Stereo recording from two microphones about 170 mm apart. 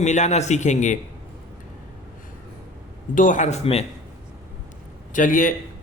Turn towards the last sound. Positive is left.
turn(degrees=50)  # may be behind; listen again after turning